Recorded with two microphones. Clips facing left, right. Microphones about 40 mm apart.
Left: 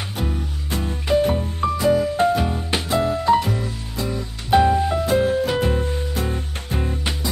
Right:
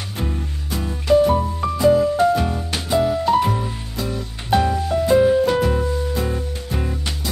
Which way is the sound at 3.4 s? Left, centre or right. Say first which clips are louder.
Right 3 dB; centre.